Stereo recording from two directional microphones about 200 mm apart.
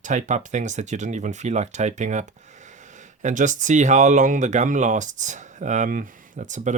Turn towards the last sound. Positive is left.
turn(degrees=-35)  # may be behind; listen again after turning